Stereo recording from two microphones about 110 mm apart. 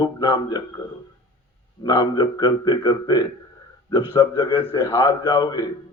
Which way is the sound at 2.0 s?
45° left (ahead or behind).